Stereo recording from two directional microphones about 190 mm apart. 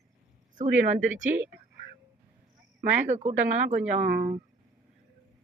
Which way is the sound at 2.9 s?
35° right (ahead or behind).